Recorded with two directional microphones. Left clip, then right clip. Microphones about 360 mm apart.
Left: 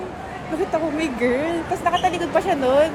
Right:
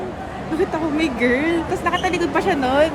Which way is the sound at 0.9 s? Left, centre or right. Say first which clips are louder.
Right 2 dB; centre.